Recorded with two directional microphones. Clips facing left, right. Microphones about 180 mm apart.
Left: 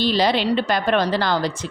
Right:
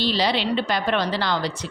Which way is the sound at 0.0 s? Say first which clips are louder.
Left 3 dB; 50° left (ahead or behind).